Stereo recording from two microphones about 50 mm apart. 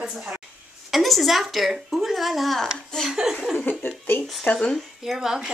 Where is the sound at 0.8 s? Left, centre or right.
Centre.